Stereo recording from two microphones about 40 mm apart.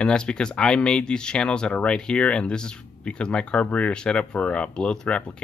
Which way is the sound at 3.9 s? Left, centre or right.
Left.